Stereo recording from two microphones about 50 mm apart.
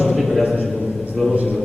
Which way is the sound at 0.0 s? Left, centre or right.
Centre.